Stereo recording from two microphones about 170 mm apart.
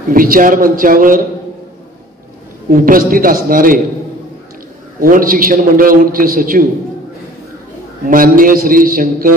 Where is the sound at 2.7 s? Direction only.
55° right (ahead or behind).